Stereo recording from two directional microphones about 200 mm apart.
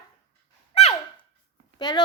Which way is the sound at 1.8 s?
20° left (ahead or behind).